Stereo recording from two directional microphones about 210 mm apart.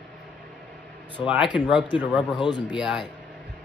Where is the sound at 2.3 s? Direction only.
20° left (ahead or behind).